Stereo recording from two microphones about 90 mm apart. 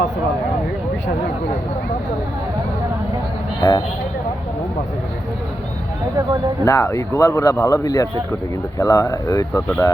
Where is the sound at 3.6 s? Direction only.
45° left (ahead or behind).